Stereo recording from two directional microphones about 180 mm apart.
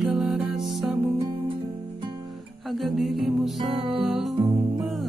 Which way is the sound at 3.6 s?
30° right (ahead or behind).